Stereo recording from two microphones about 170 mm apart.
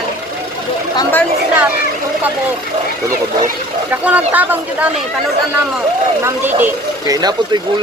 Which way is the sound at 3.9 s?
10° right (ahead or behind).